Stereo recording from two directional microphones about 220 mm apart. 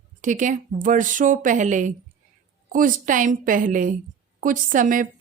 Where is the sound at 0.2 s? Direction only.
35° right (ahead or behind).